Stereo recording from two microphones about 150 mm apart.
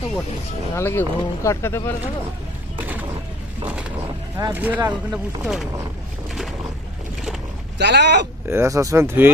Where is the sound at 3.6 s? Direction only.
10° right (ahead or behind).